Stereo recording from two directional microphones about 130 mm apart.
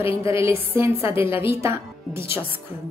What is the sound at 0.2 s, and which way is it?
Speech, 20° right (ahead or behind).